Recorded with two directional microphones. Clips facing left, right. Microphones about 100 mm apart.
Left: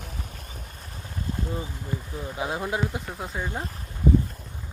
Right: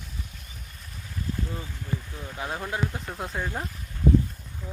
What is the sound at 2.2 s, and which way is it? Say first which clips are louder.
Speech: left 7 dB; 10° left (ahead or behind).